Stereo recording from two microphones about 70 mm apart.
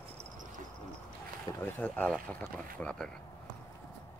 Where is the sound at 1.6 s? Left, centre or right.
Left.